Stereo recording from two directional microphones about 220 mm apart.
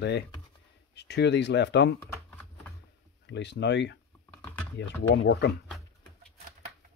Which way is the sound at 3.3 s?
50° left (ahead or behind).